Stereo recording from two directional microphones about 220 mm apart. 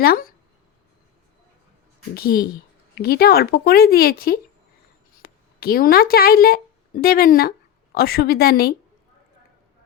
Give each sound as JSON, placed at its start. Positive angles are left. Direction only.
{"t": 0.0, "sound": "speech", "side_deg": 40}
{"t": 2.1, "sound": "speech", "side_deg": 45}